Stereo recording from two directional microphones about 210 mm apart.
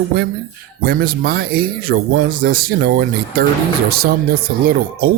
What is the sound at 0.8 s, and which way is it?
A man's voice, 45° right (ahead or behind).